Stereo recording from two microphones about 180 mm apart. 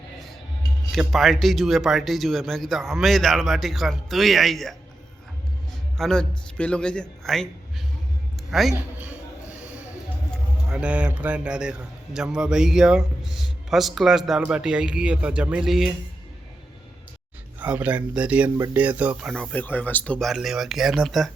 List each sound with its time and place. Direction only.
0.9 s a man's voice: centre (ahead or behind)
6.0 s a man's voice: 5° left (ahead or behind)
8.4 s a sound: centre (ahead or behind)
10.3 s a man's voice: 5° right (ahead or behind)
17.6 s a man's voice: 10° right (ahead or behind)